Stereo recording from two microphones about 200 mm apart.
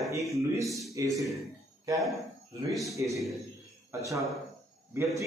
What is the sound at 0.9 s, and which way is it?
Speech, 15° right (ahead or behind).